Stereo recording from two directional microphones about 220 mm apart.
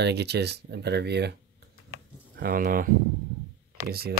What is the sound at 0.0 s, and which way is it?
Speech, 50° right (ahead or behind).